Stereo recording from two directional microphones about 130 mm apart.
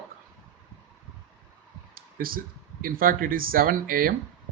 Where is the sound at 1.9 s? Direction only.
90° right.